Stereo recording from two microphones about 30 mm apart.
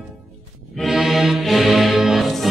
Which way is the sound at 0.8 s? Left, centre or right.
Centre.